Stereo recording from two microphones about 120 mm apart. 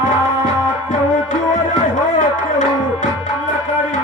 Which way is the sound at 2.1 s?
90° left.